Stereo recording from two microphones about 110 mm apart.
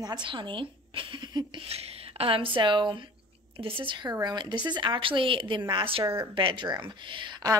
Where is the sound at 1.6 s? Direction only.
65° right (ahead or behind); by 6.0 s 50° right (ahead or behind).